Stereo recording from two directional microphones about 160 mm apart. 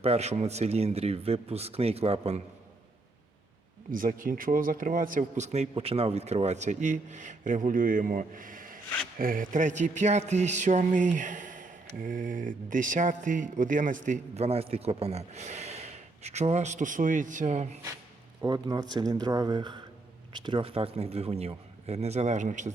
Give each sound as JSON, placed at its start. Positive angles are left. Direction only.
{"t": 0.0, "sound": "speech", "side_deg": -40}
{"t": 3.9, "sound": "a man's voice", "side_deg": -60}
{"t": 9.1, "sound": "a sound", "side_deg": -60}
{"t": 18.4, "sound": "speech", "side_deg": -25}